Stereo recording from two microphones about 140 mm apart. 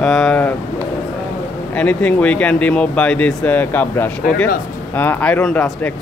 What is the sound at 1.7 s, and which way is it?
Speech, 10° left (ahead or behind).